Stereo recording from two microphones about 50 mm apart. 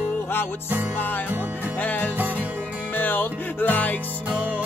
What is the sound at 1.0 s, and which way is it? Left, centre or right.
Music, left.